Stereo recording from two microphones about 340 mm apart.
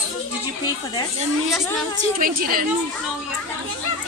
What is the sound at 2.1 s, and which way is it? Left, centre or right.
Speech, right.